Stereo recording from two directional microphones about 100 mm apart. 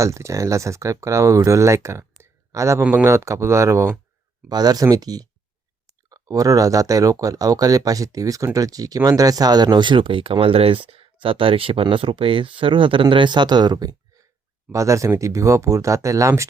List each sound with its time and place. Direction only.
0.0 s speech: 30° right (ahead or behind)
4.4 s speech: 40° right (ahead or behind)
14.7 s speech: 30° right (ahead or behind)